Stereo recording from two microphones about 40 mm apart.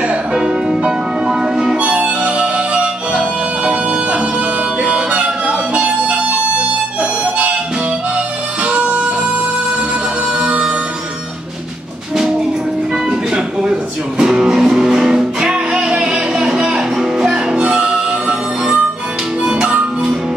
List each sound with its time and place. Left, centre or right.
0.1 s music: right
1.8 s music: right
7.0 s harmonica: right
8.6 s music: right
13.3 s music: right
19.4 s music: right